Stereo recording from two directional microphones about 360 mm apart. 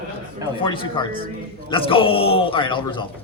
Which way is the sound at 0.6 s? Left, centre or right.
Centre.